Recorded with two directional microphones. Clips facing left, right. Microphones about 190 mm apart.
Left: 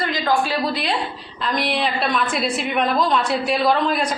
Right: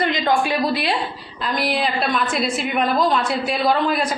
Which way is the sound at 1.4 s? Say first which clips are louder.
Even; centre (ahead or behind).